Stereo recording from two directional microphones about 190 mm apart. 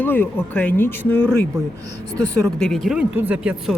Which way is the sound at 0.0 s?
10° left (ahead or behind).